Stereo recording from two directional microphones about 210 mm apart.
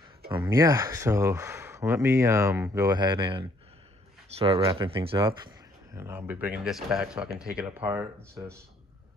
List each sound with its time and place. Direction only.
0.3 s speech: 15° right (ahead or behind)
5.9 s speech: 10° right (ahead or behind)